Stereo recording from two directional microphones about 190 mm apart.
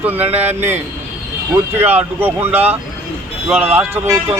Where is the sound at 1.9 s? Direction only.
10° right (ahead or behind).